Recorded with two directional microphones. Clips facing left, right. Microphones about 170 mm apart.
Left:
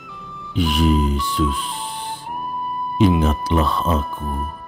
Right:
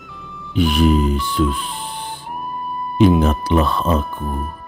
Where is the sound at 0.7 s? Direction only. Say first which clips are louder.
Right 2 dB; 60° right (ahead or behind).